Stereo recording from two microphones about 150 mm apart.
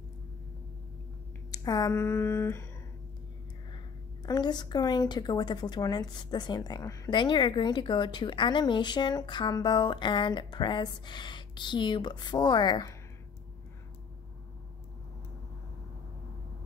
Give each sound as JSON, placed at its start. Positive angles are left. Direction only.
{"t": 1.5, "sound": "speech", "side_deg": 25}
{"t": 4.3, "sound": "speech", "side_deg": 30}